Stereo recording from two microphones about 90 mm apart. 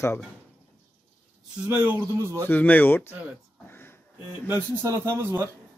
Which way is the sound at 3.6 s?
25° left (ahead or behind).